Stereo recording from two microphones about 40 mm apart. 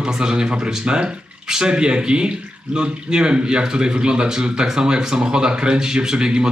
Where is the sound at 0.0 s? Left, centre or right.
Centre.